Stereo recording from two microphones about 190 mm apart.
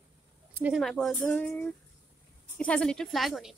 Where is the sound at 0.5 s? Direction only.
10° right (ahead or behind).